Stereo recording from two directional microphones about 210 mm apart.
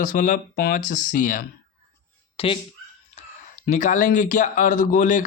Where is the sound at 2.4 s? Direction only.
25° left (ahead or behind).